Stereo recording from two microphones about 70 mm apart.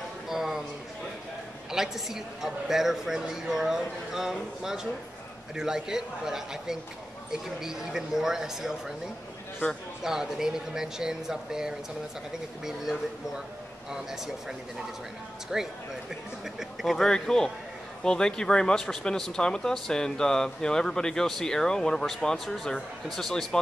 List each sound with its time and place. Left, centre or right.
0.3 s a sound: centre
1.7 s a man's voice: centre
10.0 s a man's voice: centre
15.5 s a man's voice: centre